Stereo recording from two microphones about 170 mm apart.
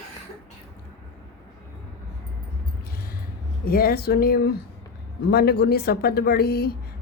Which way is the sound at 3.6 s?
60° left (ahead or behind).